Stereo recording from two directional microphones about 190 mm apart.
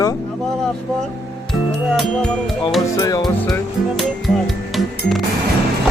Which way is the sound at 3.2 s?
Centre (ahead or behind).